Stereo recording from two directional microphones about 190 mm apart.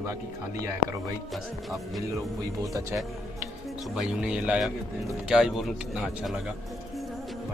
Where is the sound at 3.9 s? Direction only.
5° right (ahead or behind).